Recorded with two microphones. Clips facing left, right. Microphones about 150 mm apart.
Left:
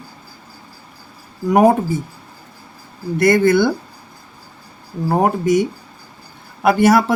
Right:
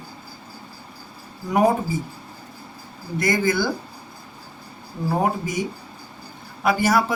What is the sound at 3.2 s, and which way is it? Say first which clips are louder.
Speech: left 8 dB; 65° left (ahead or behind).